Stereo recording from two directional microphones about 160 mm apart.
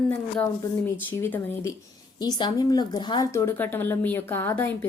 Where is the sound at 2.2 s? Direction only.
25° left (ahead or behind).